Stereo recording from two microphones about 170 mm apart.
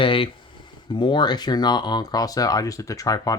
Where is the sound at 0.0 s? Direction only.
30° left (ahead or behind).